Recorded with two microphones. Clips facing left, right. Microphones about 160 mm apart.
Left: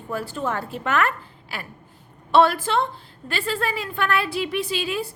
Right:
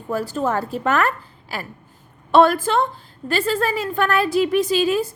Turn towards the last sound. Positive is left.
turn(degrees=-40)  # may be behind; listen again after turning